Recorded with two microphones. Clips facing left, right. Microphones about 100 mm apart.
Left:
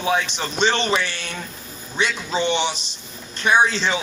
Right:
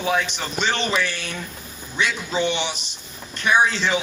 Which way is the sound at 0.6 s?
25° left (ahead or behind).